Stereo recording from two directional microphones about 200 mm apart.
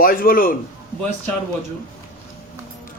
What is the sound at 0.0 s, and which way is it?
Speech, 45° left (ahead or behind).